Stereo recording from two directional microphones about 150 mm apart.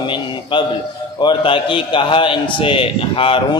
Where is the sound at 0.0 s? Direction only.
35° left (ahead or behind).